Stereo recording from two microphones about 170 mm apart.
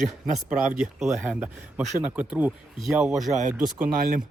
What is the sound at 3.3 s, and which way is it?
Speech, 45° right (ahead or behind).